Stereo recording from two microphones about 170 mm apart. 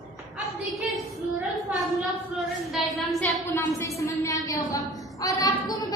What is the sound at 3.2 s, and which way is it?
A woman's voice, 15° left (ahead or behind).